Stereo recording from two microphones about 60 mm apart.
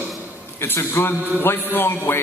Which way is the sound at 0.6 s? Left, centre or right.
Left.